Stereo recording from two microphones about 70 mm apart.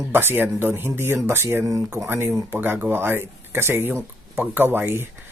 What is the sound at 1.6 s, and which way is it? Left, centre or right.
Speech, right.